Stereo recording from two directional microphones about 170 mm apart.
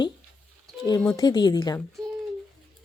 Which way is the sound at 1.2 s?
25° left (ahead or behind).